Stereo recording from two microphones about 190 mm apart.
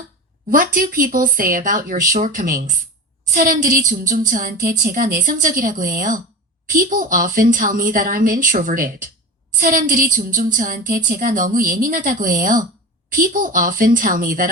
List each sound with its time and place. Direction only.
0.5 s a woman's voice: 50° right (ahead or behind)